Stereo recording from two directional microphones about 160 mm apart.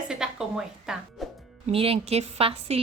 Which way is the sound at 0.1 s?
5° right (ahead or behind).